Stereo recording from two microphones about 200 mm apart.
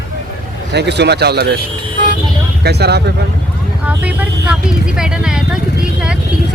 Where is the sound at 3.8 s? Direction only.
5° right (ahead or behind).